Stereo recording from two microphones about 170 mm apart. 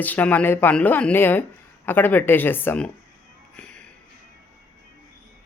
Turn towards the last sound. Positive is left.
turn(degrees=5)  # may be behind; listen again after turning